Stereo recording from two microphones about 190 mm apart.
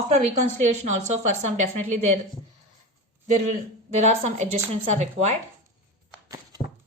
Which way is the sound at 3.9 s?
35° right (ahead or behind).